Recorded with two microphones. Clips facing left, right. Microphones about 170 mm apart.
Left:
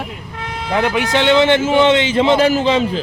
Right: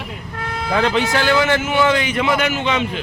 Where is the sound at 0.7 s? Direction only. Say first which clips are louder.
Left 1 dB; 15° left (ahead or behind).